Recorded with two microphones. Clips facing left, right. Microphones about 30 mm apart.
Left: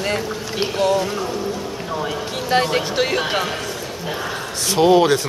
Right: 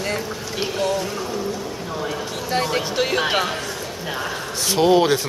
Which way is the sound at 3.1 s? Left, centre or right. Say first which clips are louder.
Right 1 dB; centre.